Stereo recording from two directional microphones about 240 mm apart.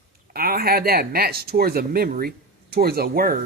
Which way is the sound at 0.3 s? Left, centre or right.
Right.